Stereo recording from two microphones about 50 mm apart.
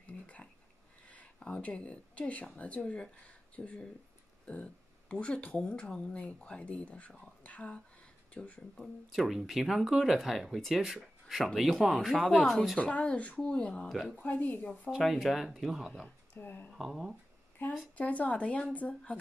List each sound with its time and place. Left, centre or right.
1.4 s speech: left
8.7 s speech: centre
12.7 s speech: left
13.8 s speech: centre
14.1 s a woman's voice: left
14.9 s speech: centre
16.3 s a woman's voice: left
16.7 s speech: centre
17.6 s a woman's voice: left